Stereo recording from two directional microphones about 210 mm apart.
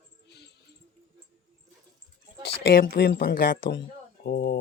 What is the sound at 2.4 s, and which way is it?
Speech, 50° left (ahead or behind).